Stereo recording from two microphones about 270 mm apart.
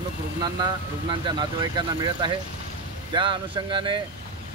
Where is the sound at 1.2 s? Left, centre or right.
Centre.